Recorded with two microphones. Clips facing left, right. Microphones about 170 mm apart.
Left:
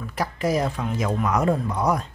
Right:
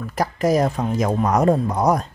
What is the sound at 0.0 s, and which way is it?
Speech, 40° right (ahead or behind).